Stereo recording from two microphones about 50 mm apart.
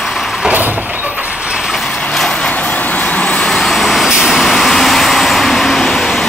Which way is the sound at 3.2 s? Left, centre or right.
Left.